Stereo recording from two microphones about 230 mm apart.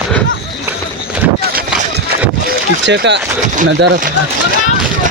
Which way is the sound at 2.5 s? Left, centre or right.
Right.